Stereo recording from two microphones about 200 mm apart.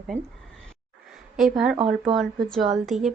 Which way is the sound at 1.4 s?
Centre (ahead or behind).